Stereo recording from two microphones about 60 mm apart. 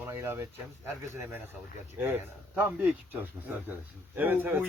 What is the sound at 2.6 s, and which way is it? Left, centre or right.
Speech, right.